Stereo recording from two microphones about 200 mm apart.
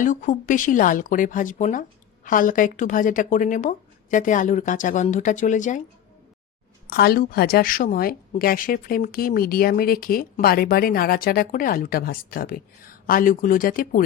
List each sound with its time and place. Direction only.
0.0 s speech: 40° left (ahead or behind)
6.8 s a woman's voice: 50° left (ahead or behind)